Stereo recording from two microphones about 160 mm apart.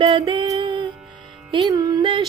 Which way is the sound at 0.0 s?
30° right (ahead or behind).